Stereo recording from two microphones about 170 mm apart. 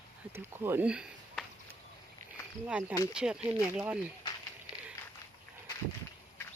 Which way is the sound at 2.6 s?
5° right (ahead or behind).